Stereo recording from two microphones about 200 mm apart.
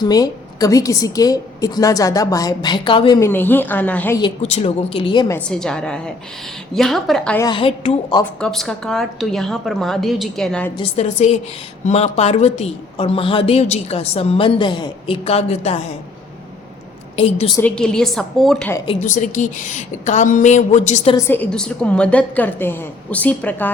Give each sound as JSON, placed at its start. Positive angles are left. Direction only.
{"t": 0.0, "sound": "a woman's voice", "side_deg": 20}
{"t": 3.2, "sound": "a woman's voice", "side_deg": 10}
{"t": 4.4, "sound": "a woman's voice", "side_deg": 35}
{"t": 5.3, "sound": "a woman's voice", "side_deg": 5}
{"t": 7.3, "sound": "a woman's voice", "side_deg": 20}
{"t": 8.2, "sound": "a woman's voice", "side_deg": 5}
{"t": 10.8, "sound": "speech", "side_deg": 30}
{"t": 17.2, "sound": "speech", "side_deg": 30}
{"t": 17.6, "sound": "a woman's voice", "side_deg": 5}
{"t": 18.9, "sound": "speech", "side_deg": 40}
{"t": 21.2, "sound": "a woman's voice", "side_deg": 10}